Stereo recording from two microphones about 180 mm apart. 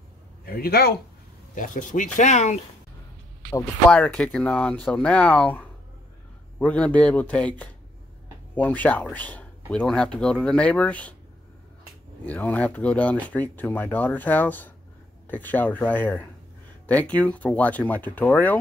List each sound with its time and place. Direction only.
0.5 s speech: 55° left (ahead or behind)
1.5 s speech: 45° left (ahead or behind)
3.9 s speech: 5° left (ahead or behind)
12.3 s speech: 10° left (ahead or behind)